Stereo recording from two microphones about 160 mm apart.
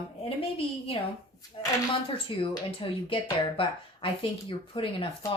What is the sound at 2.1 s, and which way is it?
Speech, 35° left (ahead or behind).